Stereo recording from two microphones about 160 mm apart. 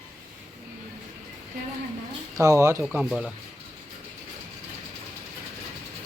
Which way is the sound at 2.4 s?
15° right (ahead or behind).